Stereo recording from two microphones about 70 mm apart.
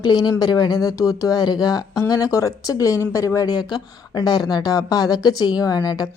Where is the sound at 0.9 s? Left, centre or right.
Left.